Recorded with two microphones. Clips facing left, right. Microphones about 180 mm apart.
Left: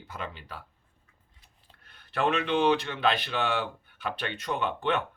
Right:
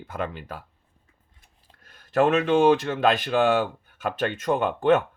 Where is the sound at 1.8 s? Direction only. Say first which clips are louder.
Right 8 dB; 40° right (ahead or behind).